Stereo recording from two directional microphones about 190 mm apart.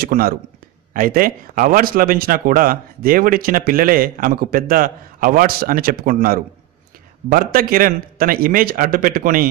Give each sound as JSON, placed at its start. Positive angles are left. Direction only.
{"t": 0.0, "sound": "speech", "side_deg": -50}